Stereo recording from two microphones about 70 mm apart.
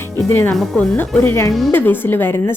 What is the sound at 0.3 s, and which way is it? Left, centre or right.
A woman's voice, left.